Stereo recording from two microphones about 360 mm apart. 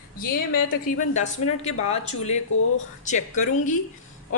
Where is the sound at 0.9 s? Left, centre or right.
Centre.